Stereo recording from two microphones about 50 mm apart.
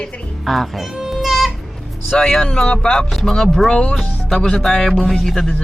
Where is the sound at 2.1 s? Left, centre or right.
Centre.